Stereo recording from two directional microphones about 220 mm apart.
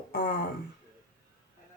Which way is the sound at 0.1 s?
45° left (ahead or behind).